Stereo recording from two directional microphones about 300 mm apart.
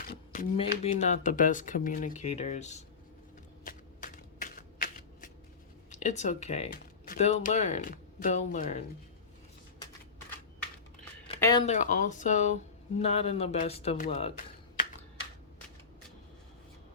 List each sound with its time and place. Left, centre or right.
0.1 s a sound: left
0.8 s speech: left
3.6 s shuffling cards: left
5.9 s speech: left
11.3 s speech: centre
11.6 s speech: left